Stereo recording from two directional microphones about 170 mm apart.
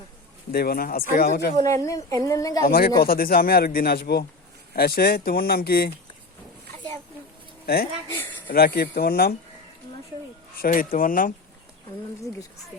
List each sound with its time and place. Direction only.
0.5 s speech: 65° left (ahead or behind)
1.6 s a woman's voice: 20° left (ahead or behind)
2.6 s speech: 60° left (ahead or behind)
8.0 s speech: 15° left (ahead or behind)
8.4 s speech: 65° left (ahead or behind)
10.6 s speech: 55° left (ahead or behind)